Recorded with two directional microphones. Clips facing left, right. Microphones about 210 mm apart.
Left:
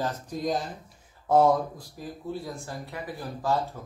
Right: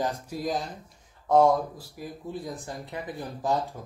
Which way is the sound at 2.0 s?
10° right (ahead or behind).